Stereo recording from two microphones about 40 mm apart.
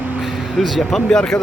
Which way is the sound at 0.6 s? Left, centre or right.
Centre.